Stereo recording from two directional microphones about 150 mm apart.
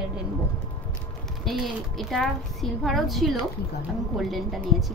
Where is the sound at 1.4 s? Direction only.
Centre (ahead or behind).